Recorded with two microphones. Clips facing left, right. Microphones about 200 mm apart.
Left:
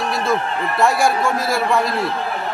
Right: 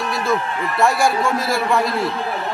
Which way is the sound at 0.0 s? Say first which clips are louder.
Left 1 dB; centre (ahead or behind).